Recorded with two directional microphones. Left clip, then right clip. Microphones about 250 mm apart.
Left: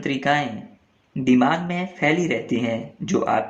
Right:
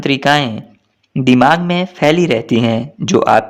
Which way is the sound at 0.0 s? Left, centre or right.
Right.